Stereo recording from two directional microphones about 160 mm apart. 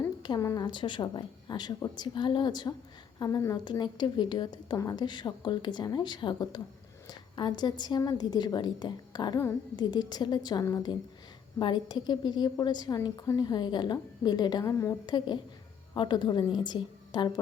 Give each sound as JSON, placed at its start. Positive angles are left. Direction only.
{"t": 0.2, "sound": "a woman's voice", "side_deg": 25}